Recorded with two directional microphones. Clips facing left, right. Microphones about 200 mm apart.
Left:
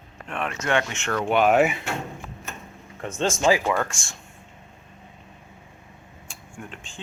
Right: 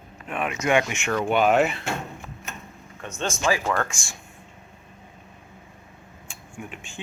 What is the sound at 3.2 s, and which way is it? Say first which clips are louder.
Speech: left 4 dB; 20° left (ahead or behind).